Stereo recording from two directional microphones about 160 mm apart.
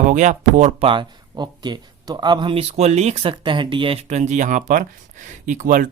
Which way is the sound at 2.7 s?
45° right (ahead or behind).